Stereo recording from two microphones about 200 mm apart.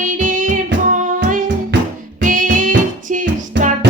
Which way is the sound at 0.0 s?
40° right (ahead or behind).